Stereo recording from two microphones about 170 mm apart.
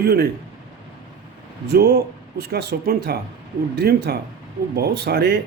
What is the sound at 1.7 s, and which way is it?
Speech, 65° right (ahead or behind).